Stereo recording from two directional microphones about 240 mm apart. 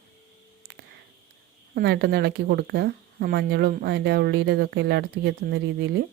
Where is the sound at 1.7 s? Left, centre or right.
Right.